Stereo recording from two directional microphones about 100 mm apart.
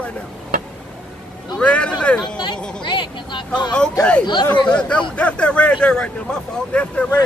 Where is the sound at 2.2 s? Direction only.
50° left (ahead or behind).